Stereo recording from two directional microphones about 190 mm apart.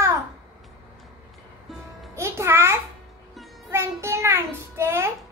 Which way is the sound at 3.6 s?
15° right (ahead or behind).